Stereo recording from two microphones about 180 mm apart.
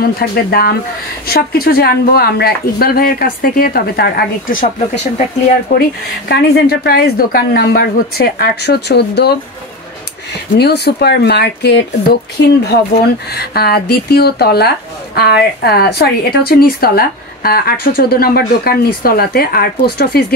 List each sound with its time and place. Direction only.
0.0 s a woman's voice: 60° left (ahead or behind)
10.6 s a woman's voice: 65° left (ahead or behind)
13.3 s a woman's voice: 60° left (ahead or behind)